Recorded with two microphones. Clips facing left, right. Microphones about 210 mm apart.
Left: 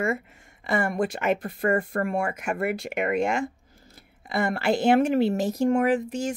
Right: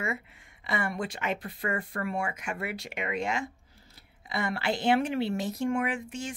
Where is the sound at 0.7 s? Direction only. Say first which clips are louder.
Left 7 dB; 50° left (ahead or behind).